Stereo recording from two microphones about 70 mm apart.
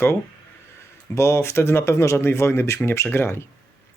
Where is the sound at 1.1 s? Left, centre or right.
Left.